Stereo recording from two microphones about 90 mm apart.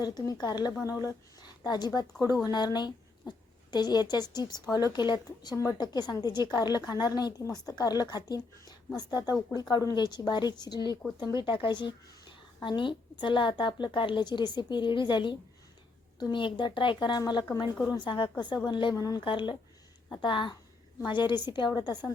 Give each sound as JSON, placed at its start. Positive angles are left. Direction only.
{"t": 0.0, "sound": "a woman's voice", "side_deg": 50}
{"t": 11.3, "sound": "a woman's voice", "side_deg": 65}
{"t": 18.9, "sound": "speech", "side_deg": 45}
{"t": 19.2, "sound": "a woman's voice", "side_deg": 65}